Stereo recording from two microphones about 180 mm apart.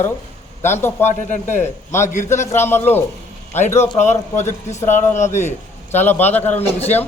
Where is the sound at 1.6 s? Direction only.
15° left (ahead or behind).